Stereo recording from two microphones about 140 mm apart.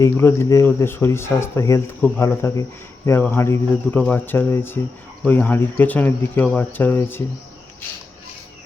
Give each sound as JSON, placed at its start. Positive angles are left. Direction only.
{"t": 0.0, "sound": "speech", "side_deg": 20}